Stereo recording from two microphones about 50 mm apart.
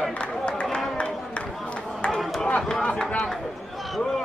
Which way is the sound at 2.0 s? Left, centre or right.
Centre.